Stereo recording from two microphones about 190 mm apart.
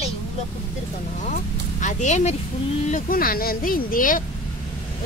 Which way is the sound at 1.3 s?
40° left (ahead or behind).